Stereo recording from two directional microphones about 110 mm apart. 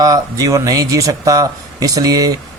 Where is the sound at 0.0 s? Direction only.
35° right (ahead or behind).